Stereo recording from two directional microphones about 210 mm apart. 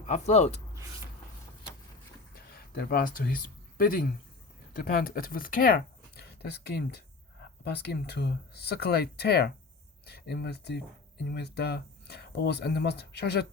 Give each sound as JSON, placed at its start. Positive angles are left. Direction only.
{"t": 0.0, "sound": "speech", "side_deg": 30}
{"t": 2.3, "sound": "speech", "side_deg": 45}